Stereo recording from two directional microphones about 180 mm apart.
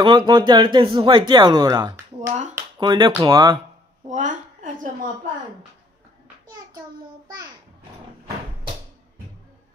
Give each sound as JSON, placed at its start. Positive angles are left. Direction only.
{"t": 0.0, "sound": "speech", "side_deg": -25}
{"t": 2.1, "sound": "speech", "side_deg": -40}
{"t": 2.8, "sound": "speech", "side_deg": -25}
{"t": 4.1, "sound": "a woman's voice", "side_deg": -45}